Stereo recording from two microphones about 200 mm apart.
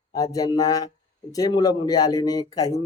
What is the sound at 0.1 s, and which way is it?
Speech, 15° left (ahead or behind).